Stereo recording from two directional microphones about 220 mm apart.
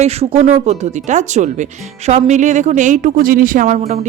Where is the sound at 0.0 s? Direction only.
30° right (ahead or behind).